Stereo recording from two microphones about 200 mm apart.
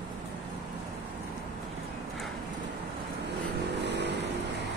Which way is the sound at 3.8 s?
60° right (ahead or behind).